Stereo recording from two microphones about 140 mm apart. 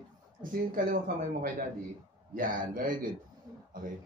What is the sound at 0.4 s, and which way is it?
Speech, 80° right.